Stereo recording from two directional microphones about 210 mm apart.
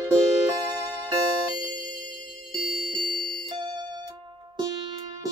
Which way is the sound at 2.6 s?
40° left (ahead or behind).